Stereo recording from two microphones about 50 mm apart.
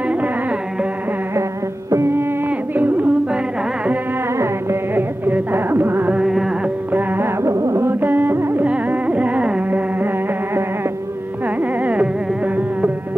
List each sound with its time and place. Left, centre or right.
2.0 s music: right
2.7 s music: right
4.9 s music: right
6.2 s music: centre
6.9 s music: right
7.4 s carnatic music: right
7.8 s carnatic music: right
8.6 s carnatic music: right
11.8 s carnatic music: right